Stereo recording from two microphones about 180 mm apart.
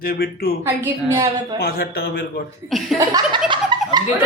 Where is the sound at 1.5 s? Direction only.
60° left (ahead or behind).